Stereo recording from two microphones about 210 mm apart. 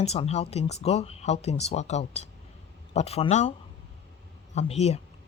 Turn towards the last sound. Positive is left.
turn(degrees=30)  # may be behind; listen again after turning